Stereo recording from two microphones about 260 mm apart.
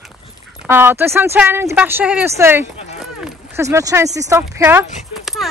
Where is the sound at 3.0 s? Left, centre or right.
Centre.